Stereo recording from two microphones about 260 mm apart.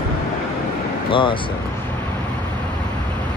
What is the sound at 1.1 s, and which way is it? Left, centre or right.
Speech, centre.